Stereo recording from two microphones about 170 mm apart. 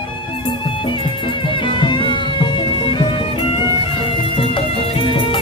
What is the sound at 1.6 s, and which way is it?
Music, 30° left (ahead or behind).